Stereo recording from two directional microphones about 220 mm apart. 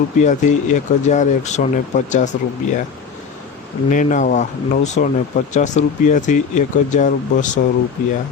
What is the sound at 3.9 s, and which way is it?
Speech, 35° left (ahead or behind).